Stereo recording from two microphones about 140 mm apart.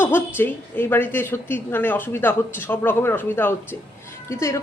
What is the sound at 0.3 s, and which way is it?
A woman's voice, 15° left (ahead or behind).